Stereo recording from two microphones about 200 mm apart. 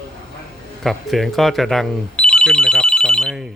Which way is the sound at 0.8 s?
Centre (ahead or behind).